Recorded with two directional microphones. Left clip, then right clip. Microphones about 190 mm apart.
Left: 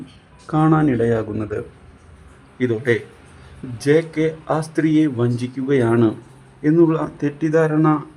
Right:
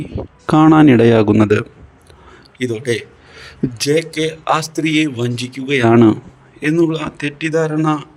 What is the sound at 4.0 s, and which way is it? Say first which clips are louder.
Speech: right 2 dB; 45° right (ahead or behind).